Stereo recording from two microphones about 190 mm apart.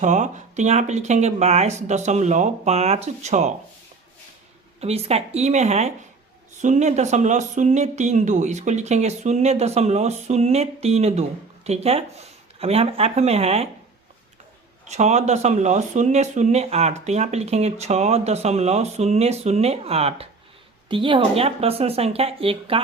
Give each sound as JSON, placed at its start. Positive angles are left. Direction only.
{"t": 0.0, "sound": "speech", "side_deg": -40}
{"t": 4.8, "sound": "speech", "side_deg": -35}
{"t": 14.8, "sound": "speech", "side_deg": -35}